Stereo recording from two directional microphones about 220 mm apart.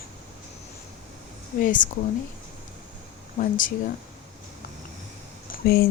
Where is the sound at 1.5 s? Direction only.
35° left (ahead or behind).